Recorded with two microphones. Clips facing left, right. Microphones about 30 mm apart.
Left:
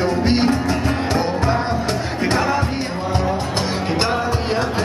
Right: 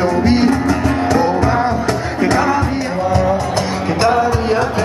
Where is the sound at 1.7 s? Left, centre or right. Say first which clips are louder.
Right 4 dB; left.